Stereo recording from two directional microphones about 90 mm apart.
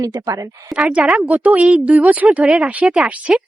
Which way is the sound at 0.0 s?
40° right (ahead or behind).